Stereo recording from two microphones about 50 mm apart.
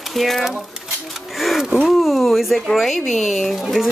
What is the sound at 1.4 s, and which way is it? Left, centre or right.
Speech, centre.